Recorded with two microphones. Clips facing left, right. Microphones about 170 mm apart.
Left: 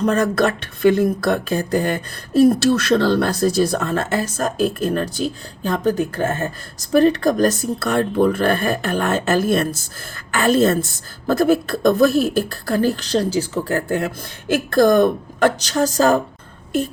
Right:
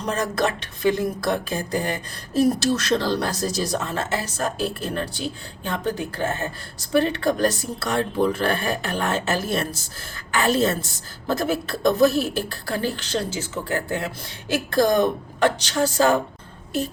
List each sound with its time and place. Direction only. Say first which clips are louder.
0.0 s a woman's voice: left 6 dB; 60° left (ahead or behind); by 16.2 s 40° left (ahead or behind)